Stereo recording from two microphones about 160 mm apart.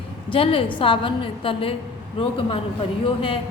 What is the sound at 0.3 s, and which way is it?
A woman's voice, 35° left (ahead or behind).